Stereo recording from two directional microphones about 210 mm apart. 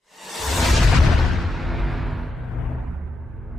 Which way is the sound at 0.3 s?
Centre (ahead or behind).